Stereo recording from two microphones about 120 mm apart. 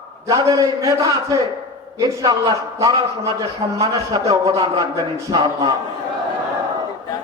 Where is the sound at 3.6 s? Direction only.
45° right (ahead or behind).